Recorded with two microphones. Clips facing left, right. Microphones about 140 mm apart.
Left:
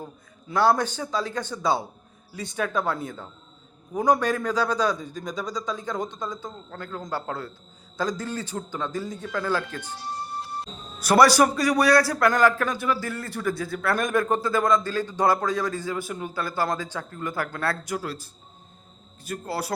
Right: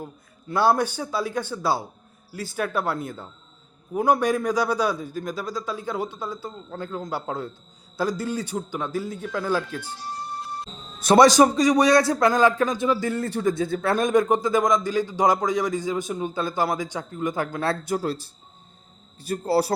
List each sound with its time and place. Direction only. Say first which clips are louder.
0.0 s a man's voice: right 2 dB; 10° right (ahead or behind)
11.0 s a man's voice: right 3 dB; 25° right (ahead or behind)